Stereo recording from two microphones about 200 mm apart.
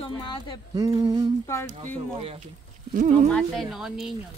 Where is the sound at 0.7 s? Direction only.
20° right (ahead or behind).